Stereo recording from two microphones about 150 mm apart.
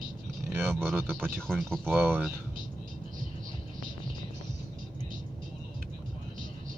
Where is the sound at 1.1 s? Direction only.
5° left (ahead or behind).